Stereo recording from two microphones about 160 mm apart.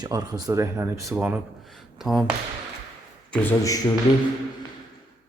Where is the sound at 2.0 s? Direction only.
Centre (ahead or behind).